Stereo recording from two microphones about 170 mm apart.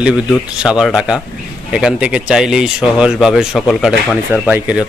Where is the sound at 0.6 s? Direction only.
5° right (ahead or behind).